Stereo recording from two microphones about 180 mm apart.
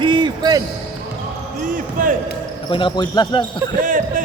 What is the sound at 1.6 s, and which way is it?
Basketball bounce, 50° right (ahead or behind).